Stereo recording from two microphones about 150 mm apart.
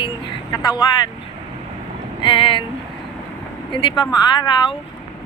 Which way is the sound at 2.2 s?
35° left (ahead or behind).